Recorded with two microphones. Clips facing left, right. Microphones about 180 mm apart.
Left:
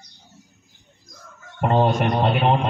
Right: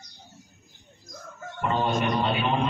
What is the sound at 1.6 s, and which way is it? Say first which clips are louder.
Speech: left 6 dB; 75° left (ahead or behind).